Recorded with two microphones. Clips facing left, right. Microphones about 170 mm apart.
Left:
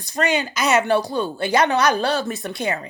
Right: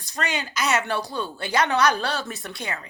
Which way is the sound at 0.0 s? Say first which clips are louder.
Left 8 dB; 15° left (ahead or behind).